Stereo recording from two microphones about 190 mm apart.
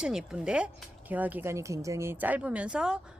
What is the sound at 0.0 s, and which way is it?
A woman's voice, 5° right (ahead or behind).